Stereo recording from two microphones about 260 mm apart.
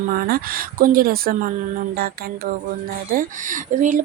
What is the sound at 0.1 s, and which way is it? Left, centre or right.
Speech, right.